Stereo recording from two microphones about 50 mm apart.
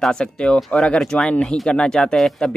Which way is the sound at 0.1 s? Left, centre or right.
Centre.